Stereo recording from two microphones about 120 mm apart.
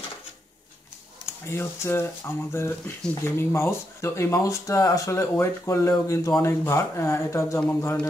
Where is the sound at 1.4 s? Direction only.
20° left (ahead or behind).